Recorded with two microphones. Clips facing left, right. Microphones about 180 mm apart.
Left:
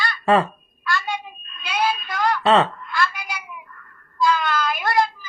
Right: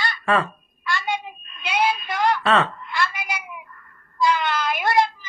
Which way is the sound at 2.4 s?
30° left (ahead or behind).